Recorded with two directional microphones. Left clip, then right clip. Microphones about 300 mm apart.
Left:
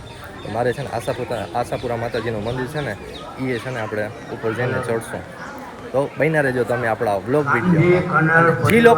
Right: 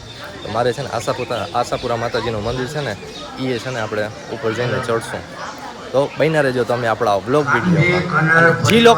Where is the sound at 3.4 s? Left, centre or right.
Centre.